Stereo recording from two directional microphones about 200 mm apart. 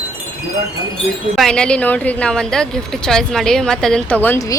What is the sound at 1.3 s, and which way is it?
A woman's voice, 5° left (ahead or behind).